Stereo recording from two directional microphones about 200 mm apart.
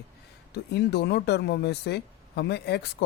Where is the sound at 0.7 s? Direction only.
55° left (ahead or behind).